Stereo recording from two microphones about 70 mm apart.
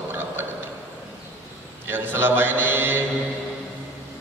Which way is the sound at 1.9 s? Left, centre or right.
Right.